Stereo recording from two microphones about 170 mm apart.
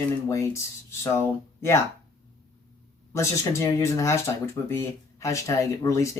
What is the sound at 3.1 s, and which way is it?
Speech, 15° left (ahead or behind).